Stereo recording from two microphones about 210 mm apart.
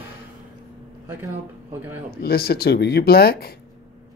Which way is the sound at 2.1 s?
45° left (ahead or behind).